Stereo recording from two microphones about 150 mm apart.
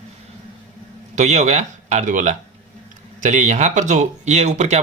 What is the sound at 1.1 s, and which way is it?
Speech, 50° right (ahead or behind).